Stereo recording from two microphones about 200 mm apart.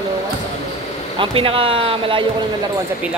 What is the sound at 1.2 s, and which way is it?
Speech, 25° right (ahead or behind).